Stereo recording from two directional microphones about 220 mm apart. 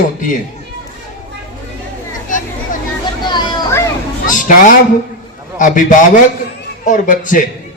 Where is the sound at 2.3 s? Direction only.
35° left (ahead or behind).